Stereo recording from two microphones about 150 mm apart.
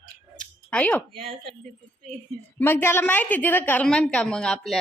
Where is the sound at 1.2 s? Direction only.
35° right (ahead or behind).